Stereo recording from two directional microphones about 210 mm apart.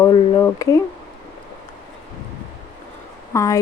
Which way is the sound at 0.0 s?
15° left (ahead or behind).